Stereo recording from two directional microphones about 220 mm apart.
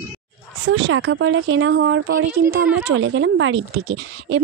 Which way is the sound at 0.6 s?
55° right (ahead or behind).